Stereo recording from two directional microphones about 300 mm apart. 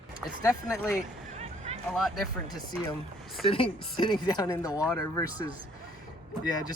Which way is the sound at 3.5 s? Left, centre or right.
Centre.